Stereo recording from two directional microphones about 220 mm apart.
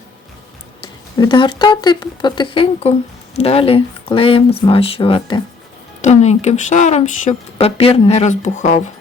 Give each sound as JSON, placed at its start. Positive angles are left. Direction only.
{"t": 0.8, "sound": "speech", "side_deg": 20}